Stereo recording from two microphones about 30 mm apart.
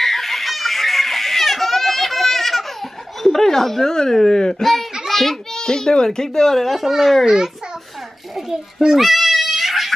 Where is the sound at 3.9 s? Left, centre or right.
Centre.